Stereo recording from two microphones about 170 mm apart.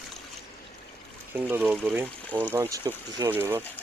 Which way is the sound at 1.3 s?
10° right (ahead or behind).